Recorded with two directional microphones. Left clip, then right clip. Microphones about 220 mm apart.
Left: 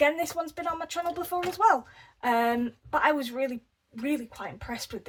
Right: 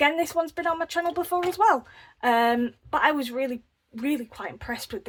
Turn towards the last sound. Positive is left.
turn(degrees=-40)  # may be behind; listen again after turning